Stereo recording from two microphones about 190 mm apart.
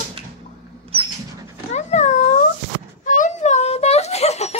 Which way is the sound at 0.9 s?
30° right (ahead or behind).